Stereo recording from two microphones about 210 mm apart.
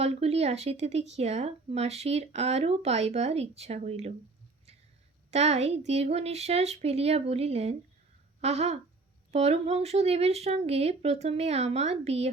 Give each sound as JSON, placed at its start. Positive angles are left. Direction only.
{"t": 0.0, "sound": "speech", "side_deg": -30}
{"t": 5.3, "sound": "speech", "side_deg": -30}